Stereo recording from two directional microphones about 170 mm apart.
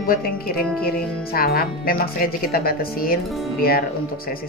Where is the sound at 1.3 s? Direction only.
60° left (ahead or behind).